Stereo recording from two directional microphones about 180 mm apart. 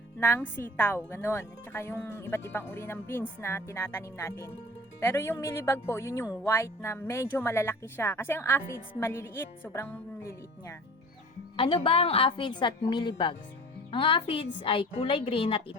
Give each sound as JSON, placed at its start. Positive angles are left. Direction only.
{"t": 0.2, "sound": "a woman's voice", "side_deg": 15}
{"t": 11.5, "sound": "a woman's voice", "side_deg": 30}